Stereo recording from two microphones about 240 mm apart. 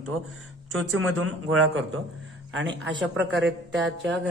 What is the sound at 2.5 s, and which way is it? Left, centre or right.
A man's voice, right.